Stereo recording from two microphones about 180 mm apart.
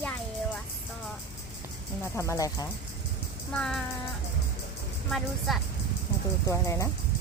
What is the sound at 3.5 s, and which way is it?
Speech, 5° left (ahead or behind).